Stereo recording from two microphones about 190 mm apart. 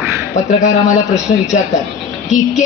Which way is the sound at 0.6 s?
40° left (ahead or behind).